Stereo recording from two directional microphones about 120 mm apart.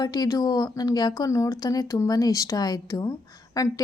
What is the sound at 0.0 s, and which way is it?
A woman's voice, 35° left (ahead or behind).